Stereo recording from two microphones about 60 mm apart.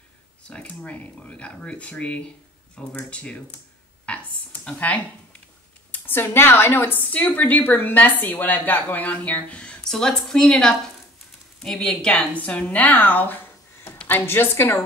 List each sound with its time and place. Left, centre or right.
0.5 s speech: left
4.0 s a sound: centre
4.7 s a woman's voice: left
6.9 s speech: left
9.8 s a woman's voice: centre
12.1 s a woman's voice: left